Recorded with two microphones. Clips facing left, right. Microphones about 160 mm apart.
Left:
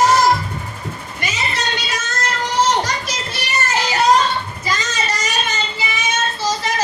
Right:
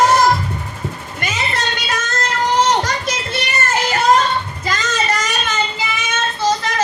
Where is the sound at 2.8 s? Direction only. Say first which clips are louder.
Right 3 dB; 55° right (ahead or behind).